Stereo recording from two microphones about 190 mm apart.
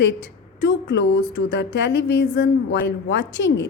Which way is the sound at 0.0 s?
65° left (ahead or behind).